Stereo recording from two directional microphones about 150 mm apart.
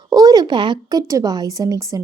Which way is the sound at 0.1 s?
25° right (ahead or behind).